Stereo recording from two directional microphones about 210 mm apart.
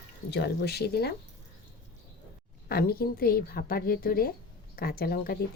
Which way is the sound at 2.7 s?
45° left (ahead or behind).